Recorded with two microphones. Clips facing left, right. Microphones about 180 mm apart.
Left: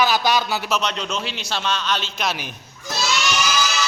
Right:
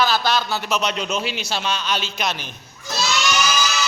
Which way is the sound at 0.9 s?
10° right (ahead or behind).